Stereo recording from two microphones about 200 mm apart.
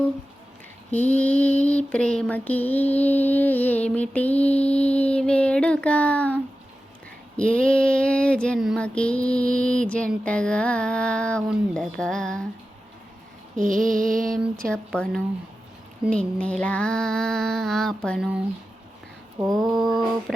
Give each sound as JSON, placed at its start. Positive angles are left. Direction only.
{"t": 0.9, "sound": "a sound", "side_deg": 10}
{"t": 7.3, "sound": "female singing", "side_deg": 5}
{"t": 13.6, "sound": "female singing", "side_deg": -40}
{"t": 14.7, "sound": "female singing", "side_deg": 5}
{"t": 19.5, "sound": "female singing", "side_deg": 0}